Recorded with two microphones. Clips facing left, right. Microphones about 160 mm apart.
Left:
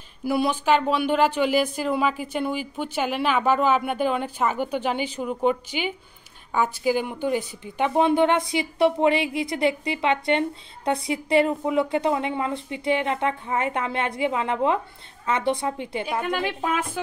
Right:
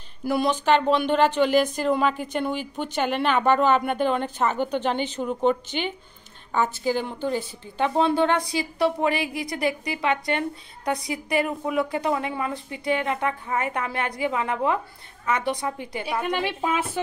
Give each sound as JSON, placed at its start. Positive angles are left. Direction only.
{"t": 0.2, "sound": "a woman's voice", "side_deg": 5}
{"t": 16.3, "sound": "a woman's voice", "side_deg": -5}